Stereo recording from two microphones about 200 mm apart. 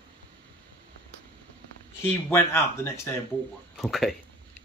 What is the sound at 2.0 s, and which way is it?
A man's voice, 10° left (ahead or behind).